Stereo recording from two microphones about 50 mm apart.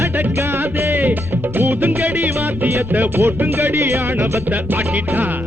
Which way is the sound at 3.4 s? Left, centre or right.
Right.